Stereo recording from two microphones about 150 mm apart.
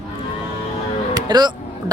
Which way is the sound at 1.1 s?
30° right (ahead or behind).